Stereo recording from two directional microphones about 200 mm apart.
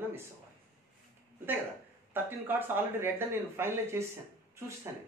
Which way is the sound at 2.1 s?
10° right (ahead or behind).